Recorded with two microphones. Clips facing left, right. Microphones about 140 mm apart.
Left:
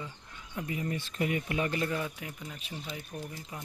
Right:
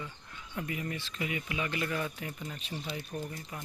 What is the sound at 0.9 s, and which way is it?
Speech, 50° left (ahead or behind).